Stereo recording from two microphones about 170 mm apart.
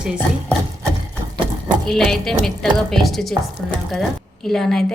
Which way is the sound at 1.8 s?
Centre (ahead or behind).